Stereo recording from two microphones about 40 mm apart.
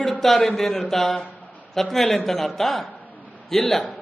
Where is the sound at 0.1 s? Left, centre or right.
Centre.